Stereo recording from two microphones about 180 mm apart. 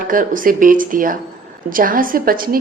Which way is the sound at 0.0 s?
50° right (ahead or behind).